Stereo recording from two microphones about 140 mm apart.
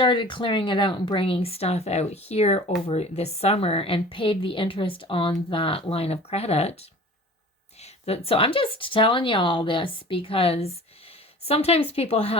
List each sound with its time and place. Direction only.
0.0 s speech: 35° left (ahead or behind)
7.8 s speech: 45° left (ahead or behind)